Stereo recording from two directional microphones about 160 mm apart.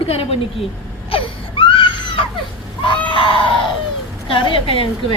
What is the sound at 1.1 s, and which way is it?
Baby cry, 35° left (ahead or behind).